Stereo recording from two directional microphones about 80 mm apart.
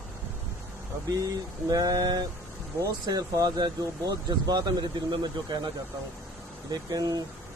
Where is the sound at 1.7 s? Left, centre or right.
Right.